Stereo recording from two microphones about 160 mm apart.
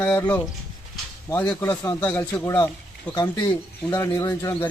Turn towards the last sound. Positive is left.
turn(degrees=20)  # may be behind; listen again after turning